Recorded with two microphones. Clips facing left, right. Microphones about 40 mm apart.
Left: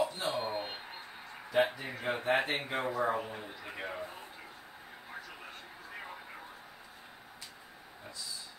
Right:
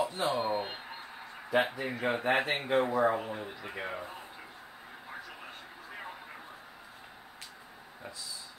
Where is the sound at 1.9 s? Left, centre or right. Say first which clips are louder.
Right 2 dB; centre.